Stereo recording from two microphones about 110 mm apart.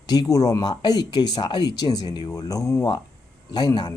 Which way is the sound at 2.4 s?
35° left (ahead or behind).